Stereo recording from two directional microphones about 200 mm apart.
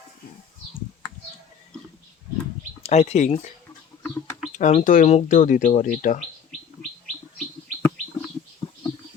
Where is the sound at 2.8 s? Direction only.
35° left (ahead or behind).